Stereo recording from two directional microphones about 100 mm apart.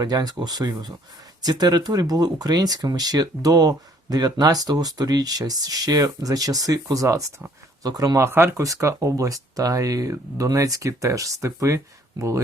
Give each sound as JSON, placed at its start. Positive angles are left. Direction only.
{"t": 0.0, "sound": "speech", "side_deg": -40}
{"t": 8.3, "sound": "speech", "side_deg": -25}